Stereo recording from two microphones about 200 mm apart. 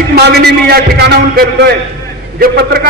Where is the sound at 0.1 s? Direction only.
55° right (ahead or behind).